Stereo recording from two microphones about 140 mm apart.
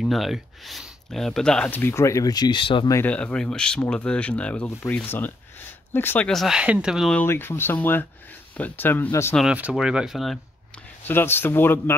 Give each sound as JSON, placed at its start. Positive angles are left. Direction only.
{"t": 0.0, "sound": "speech", "side_deg": 0}
{"t": 2.9, "sound": "speech", "side_deg": 15}
{"t": 6.2, "sound": "speech", "side_deg": 0}
{"t": 7.2, "sound": "speech", "side_deg": 15}
{"t": 9.4, "sound": "speech", "side_deg": -10}
{"t": 11.1, "sound": "speech", "side_deg": 15}